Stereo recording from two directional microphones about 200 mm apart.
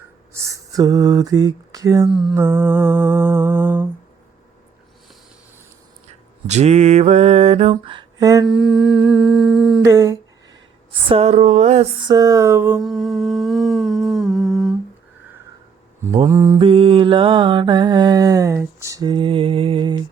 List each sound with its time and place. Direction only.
0.3 s a sound: 15° right (ahead or behind)
2.0 s humming: centre (ahead or behind)
2.4 s mantra: 10° right (ahead or behind)
6.1 s a sound: 35° right (ahead or behind); by 8.4 s 20° right (ahead or behind)
8.4 s humming: centre (ahead or behind)
9.8 s humming: 15° right (ahead or behind)
11.1 s mantra: 30° right (ahead or behind); by 12.8 s 10° right (ahead or behind)
12.8 s humming: centre (ahead or behind)
16.2 s mantra: 15° right (ahead or behind)
16.6 s mantra: 25° right (ahead or behind)